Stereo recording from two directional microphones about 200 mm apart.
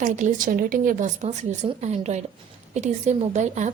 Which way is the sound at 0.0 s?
40° right (ahead or behind).